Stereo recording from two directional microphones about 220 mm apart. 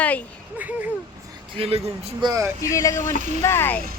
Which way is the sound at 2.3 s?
15° right (ahead or behind).